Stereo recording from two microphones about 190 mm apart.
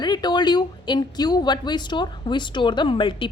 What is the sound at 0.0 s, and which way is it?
Speech, 20° left (ahead or behind).